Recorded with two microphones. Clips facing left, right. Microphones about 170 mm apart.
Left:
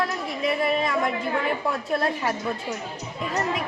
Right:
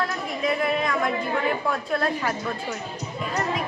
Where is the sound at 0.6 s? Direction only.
20° left (ahead or behind).